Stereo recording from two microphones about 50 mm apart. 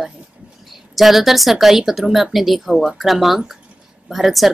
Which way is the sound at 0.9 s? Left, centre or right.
Centre.